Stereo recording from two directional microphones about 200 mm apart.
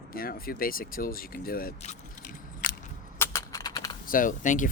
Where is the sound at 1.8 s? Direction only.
40° left (ahead or behind).